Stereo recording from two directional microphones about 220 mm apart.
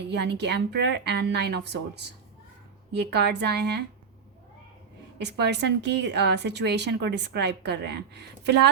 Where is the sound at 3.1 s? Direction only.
50° right (ahead or behind).